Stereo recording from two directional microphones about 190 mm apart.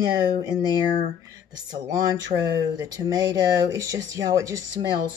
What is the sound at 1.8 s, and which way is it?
A woman's voice, 20° right (ahead or behind).